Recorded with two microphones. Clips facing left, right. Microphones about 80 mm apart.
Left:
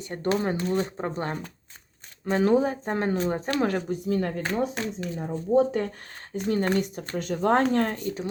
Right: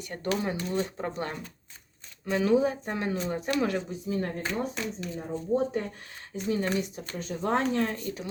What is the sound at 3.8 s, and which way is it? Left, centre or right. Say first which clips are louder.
Speech: left 5 dB; left.